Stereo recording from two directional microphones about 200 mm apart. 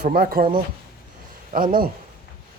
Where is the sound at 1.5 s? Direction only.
45° right (ahead or behind).